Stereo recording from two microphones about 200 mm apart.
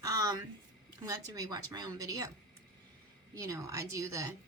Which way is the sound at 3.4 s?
15° right (ahead or behind).